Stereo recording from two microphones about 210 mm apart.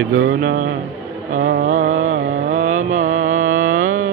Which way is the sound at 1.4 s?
40° right (ahead or behind).